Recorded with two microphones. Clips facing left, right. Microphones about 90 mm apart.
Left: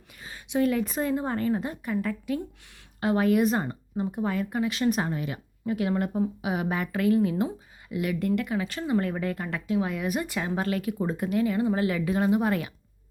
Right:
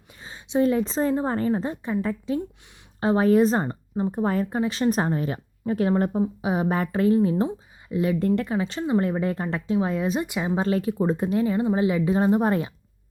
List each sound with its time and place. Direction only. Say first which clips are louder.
0.2 s speech: right 3 dB; 25° right (ahead or behind)